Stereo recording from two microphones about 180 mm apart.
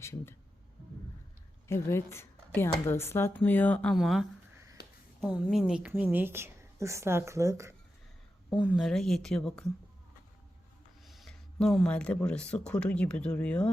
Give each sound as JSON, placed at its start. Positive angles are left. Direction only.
{"t": 0.0, "sound": "speech", "side_deg": 15}
{"t": 1.6, "sound": "speech", "side_deg": 15}
{"t": 4.8, "sound": "a sound", "side_deg": 65}
{"t": 5.2, "sound": "a woman's voice", "side_deg": 0}
{"t": 8.6, "sound": "a woman's voice", "side_deg": 0}
{"t": 11.0, "sound": "speech", "side_deg": 0}